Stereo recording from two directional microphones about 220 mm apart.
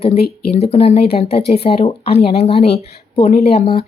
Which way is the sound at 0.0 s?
25° left (ahead or behind).